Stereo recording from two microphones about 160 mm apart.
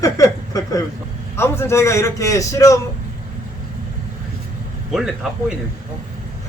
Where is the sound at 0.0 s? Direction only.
20° left (ahead or behind).